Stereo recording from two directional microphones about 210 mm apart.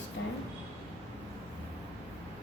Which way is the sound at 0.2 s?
65° left (ahead or behind).